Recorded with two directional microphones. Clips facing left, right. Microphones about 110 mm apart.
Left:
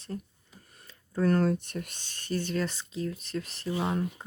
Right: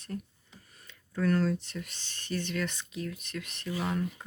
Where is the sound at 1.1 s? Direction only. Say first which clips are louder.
Left 3 dB; 40° left (ahead or behind).